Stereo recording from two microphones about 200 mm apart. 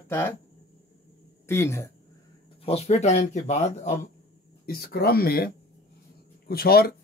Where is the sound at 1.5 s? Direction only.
15° left (ahead or behind).